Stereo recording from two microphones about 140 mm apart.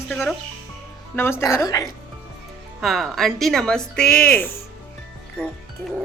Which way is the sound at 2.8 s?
Centre (ahead or behind).